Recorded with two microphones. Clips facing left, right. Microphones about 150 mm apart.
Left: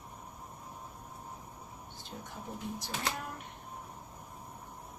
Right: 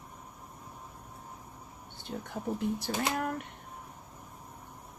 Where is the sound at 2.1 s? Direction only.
65° right (ahead or behind).